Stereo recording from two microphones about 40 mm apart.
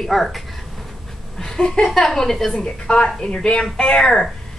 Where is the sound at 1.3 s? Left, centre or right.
Centre.